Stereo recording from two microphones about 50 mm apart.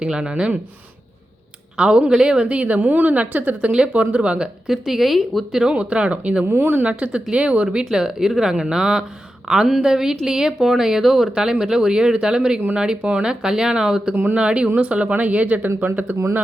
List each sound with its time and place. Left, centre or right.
0.0 s a woman's voice: centre
1.7 s a woman's voice: centre
4.7 s speech: centre
5.5 s speech: centre
5.7 s a woman's voice: right
6.4 s speech: right
6.8 s a woman's voice: right
7.9 s a woman's voice: centre; by 16.1 s right